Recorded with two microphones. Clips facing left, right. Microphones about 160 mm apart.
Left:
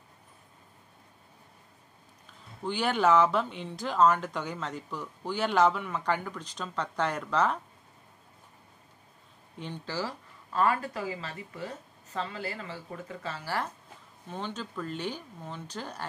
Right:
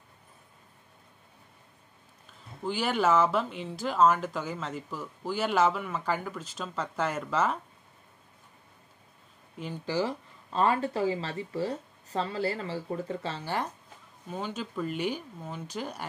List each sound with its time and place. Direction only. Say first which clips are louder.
2.6 s speech: left 1 dB; 5° right (ahead or behind)
9.8 s speech: right 7 dB; 20° right (ahead or behind)
14.3 s speech: right 2 dB; 10° right (ahead or behind)